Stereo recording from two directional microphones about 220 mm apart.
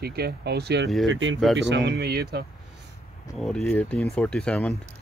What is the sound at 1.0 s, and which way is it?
Speech, 60° right (ahead or behind).